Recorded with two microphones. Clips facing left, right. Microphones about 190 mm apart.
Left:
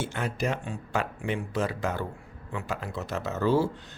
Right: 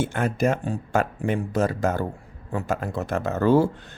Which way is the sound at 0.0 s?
50° right (ahead or behind).